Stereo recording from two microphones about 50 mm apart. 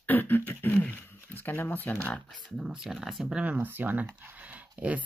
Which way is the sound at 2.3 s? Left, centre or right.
Centre.